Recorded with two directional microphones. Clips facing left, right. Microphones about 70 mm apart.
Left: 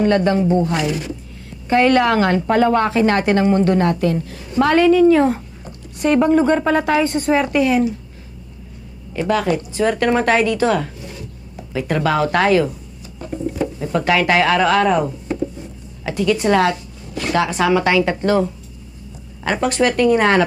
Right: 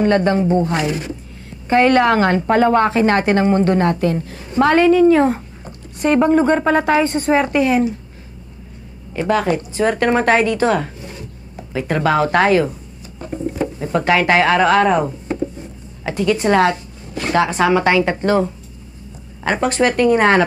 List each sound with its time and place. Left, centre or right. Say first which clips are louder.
0.0 s a woman's voice: right 1 dB; right
9.1 s a woman's voice: right 1 dB; right